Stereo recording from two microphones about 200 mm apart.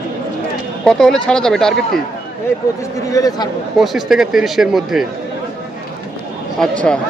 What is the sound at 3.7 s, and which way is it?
Speech, centre (ahead or behind).